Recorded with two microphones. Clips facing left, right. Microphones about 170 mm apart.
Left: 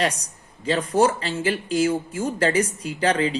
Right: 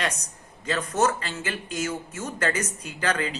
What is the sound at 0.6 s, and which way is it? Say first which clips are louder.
Speech: left 5 dB; 30° left (ahead or behind).